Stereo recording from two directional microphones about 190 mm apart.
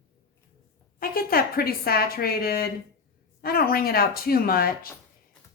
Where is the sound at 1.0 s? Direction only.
50° left (ahead or behind).